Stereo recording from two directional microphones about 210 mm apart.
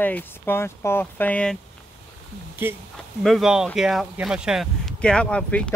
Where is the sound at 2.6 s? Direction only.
10° right (ahead or behind).